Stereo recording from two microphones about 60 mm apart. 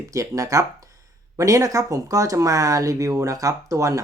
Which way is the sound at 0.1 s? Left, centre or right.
Right.